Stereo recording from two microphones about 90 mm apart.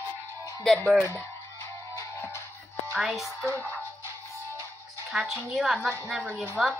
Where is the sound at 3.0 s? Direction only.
Centre (ahead or behind).